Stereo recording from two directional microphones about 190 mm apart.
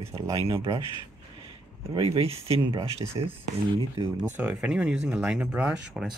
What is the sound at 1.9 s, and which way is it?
Speech, 30° right (ahead or behind).